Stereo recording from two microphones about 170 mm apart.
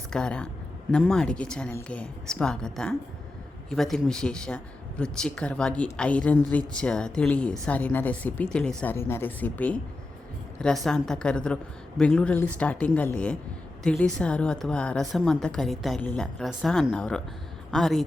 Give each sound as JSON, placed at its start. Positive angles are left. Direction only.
{"t": 0.1, "sound": "a woman's voice", "side_deg": 5}